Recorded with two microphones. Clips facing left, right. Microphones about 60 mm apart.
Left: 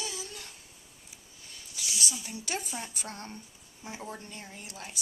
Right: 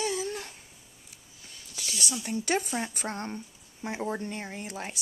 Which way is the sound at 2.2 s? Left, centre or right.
Right.